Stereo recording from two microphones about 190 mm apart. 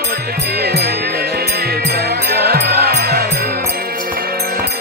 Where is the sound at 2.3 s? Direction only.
55° right (ahead or behind).